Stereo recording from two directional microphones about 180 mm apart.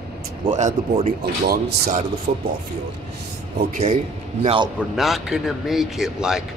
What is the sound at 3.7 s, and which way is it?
Speech, 40° right (ahead or behind).